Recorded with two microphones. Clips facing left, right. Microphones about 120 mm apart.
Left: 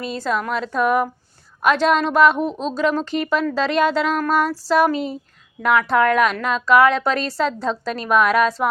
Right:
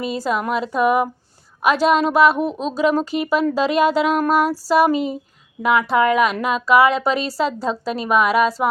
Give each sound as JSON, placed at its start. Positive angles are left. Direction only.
{"t": 0.0, "sound": "a woman's voice", "side_deg": -10}